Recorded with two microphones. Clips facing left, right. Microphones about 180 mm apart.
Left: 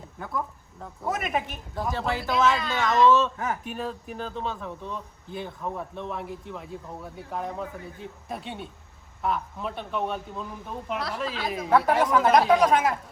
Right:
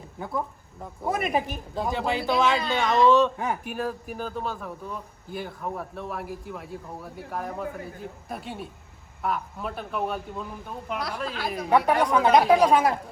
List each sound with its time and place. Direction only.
0.2 s speech: 15° right (ahead or behind)
1.2 s speech: 35° right (ahead or behind); by 12.5 s centre (ahead or behind)
12.5 s speech: 30° right (ahead or behind)